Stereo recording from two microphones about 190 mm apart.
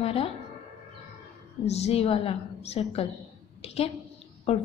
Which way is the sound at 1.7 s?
35° left (ahead or behind).